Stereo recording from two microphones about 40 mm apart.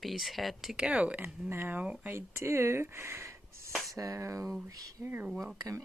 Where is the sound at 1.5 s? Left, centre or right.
Right.